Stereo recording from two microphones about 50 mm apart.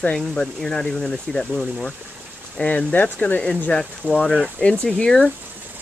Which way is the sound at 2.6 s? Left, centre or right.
Left.